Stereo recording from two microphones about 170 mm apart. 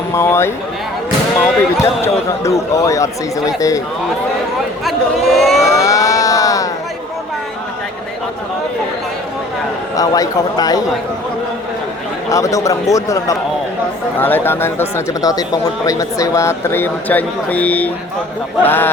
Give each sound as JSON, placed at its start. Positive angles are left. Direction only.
{"t": 0.1, "sound": "speech", "side_deg": 15}
{"t": 1.8, "sound": "speech", "side_deg": 15}
{"t": 4.9, "sound": "a sound", "side_deg": 0}
{"t": 5.7, "sound": "a sound", "side_deg": 20}
{"t": 10.0, "sound": "speech", "side_deg": 20}
{"t": 12.3, "sound": "speech", "side_deg": 20}